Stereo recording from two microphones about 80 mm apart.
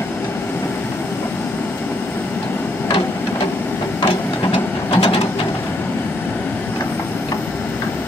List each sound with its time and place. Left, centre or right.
4.0 s printer: left